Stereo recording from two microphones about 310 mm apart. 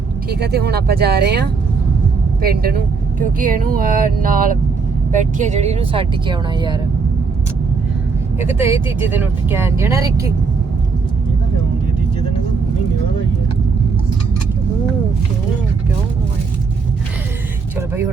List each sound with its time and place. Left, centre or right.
0.3 s speech: right; by 6.7 s centre
8.4 s speech: centre